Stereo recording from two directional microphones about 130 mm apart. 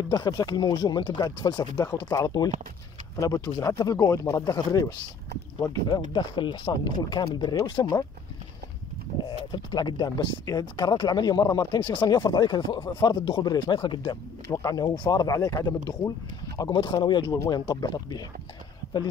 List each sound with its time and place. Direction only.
0.1 s speech: 30° left (ahead or behind)
9.2 s speech: 35° left (ahead or behind)